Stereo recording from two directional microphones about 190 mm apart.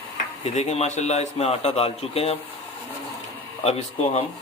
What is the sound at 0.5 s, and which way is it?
A man's voice, 35° left (ahead or behind).